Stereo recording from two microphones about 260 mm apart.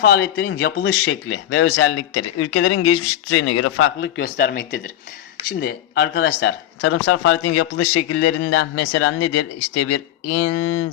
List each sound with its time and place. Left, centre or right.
0.0 s speech: left
1.5 s speech: left
4.2 s speech: left
8.7 s speech: left